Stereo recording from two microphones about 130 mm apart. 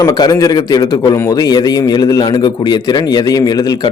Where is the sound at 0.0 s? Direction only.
30° left (ahead or behind).